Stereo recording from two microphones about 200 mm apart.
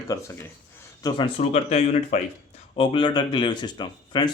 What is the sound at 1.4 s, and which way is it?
Speech, 35° left (ahead or behind).